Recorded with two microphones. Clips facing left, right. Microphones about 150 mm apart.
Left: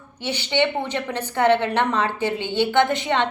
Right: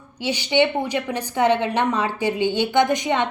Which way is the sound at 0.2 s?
15° right (ahead or behind).